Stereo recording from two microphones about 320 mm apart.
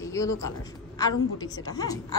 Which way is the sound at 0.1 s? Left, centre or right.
Centre.